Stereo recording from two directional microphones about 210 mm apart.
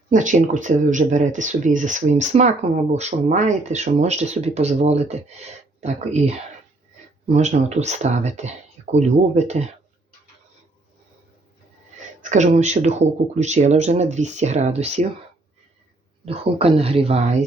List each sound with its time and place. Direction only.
0.1 s speech: 35° right (ahead or behind)
12.3 s speech: 35° right (ahead or behind)
16.2 s speech: 30° right (ahead or behind)